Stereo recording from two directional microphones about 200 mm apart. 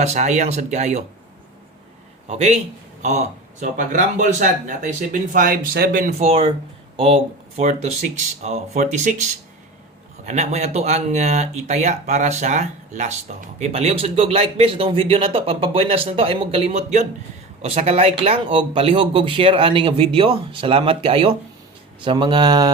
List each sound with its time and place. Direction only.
0.0 s speech: 35° right (ahead or behind)
2.2 s a man's voice: 35° right (ahead or behind)